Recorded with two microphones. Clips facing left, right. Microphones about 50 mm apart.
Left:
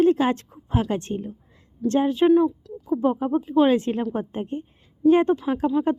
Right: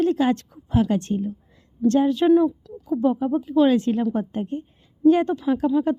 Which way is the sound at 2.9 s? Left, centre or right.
Left.